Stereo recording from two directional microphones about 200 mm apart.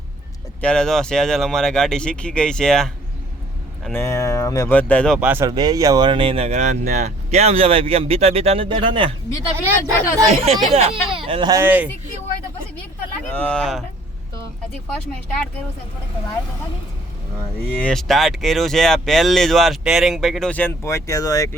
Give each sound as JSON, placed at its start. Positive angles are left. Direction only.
{"t": 0.6, "sound": "speech", "side_deg": 5}
{"t": 5.3, "sound": "speech", "side_deg": -15}
{"t": 9.5, "sound": "speech", "side_deg": -10}
{"t": 10.4, "sound": "speech", "side_deg": -30}
{"t": 13.3, "sound": "speech", "side_deg": 5}
{"t": 17.7, "sound": "speech", "side_deg": 5}